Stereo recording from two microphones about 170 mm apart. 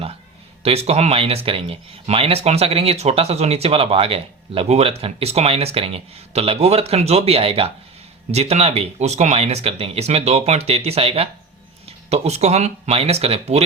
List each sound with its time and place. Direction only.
0.6 s speech: 35° right (ahead or behind)